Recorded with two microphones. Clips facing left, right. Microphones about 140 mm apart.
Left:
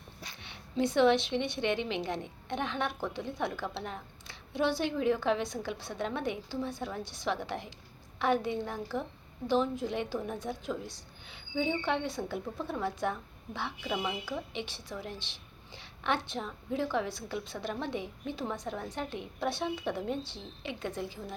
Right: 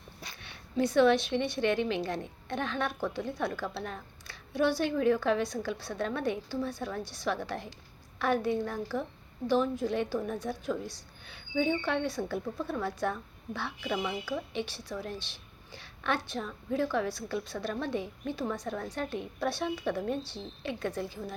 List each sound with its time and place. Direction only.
0.3 s a woman's voice: 20° left (ahead or behind)